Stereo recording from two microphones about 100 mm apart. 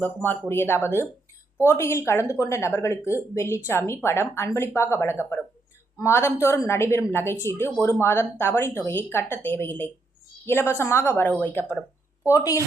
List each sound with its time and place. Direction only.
0.0 s a woman's voice: 20° left (ahead or behind)
12.3 s a woman's voice: 35° left (ahead or behind)